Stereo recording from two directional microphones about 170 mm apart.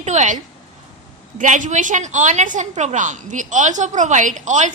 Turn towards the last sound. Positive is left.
turn(degrees=-45)  # may be behind; listen again after turning